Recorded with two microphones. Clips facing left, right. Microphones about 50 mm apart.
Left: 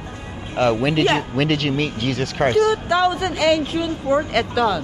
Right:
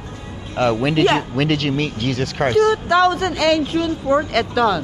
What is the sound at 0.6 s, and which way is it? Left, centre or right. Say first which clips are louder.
A man's voice: right 1 dB; centre.